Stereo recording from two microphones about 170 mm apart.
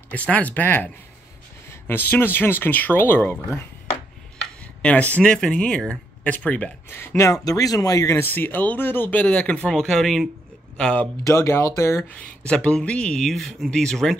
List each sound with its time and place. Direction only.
0.1 s speech: 10° left (ahead or behind)
11.2 s speech: 15° left (ahead or behind)